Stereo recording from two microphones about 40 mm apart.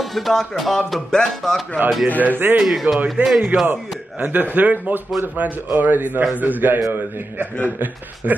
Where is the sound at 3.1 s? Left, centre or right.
Centre.